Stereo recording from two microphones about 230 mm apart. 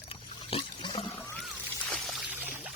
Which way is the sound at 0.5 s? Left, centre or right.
Left.